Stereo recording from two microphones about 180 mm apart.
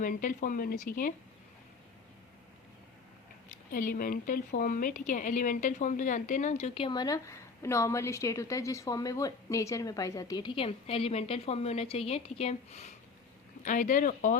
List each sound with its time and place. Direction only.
0.0 s speech: 50° left (ahead or behind)
3.7 s speech: 50° left (ahead or behind)